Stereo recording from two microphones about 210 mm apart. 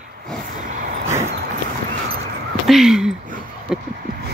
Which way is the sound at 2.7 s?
Centre (ahead or behind).